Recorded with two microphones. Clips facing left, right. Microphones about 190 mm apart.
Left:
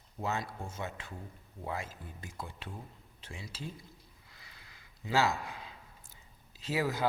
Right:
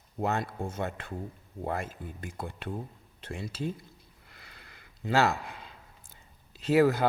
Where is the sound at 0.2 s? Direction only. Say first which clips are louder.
Right 6 dB; 55° right (ahead or behind).